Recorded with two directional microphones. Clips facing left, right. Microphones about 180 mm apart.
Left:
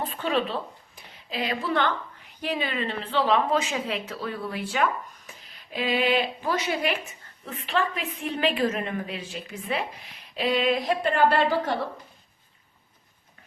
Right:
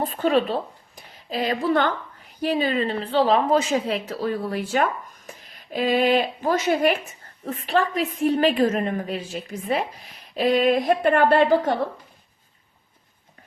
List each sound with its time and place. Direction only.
0.0 s a woman's voice: 40° right (ahead or behind)